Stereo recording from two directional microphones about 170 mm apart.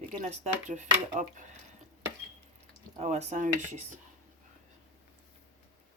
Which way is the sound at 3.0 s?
40° right (ahead or behind).